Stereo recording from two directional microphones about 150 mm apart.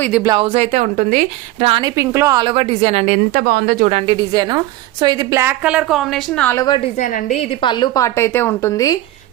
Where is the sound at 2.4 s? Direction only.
35° right (ahead or behind); by 3.9 s 85° right.